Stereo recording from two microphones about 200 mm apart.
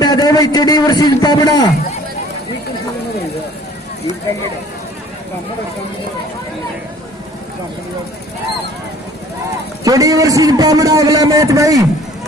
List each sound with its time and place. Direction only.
0.0 s a man's voice: 20° left (ahead or behind)
9.8 s a man's voice: 15° right (ahead or behind)